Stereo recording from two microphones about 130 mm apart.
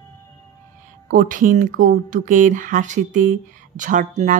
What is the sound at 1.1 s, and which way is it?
Speech, 90° right.